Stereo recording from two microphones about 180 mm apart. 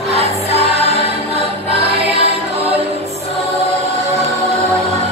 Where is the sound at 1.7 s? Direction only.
30° right (ahead or behind).